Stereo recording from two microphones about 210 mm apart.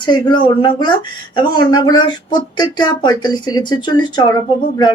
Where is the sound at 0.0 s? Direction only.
20° left (ahead or behind).